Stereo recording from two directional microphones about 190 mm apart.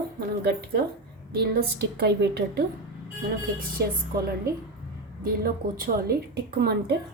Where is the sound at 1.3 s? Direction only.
55° right (ahead or behind).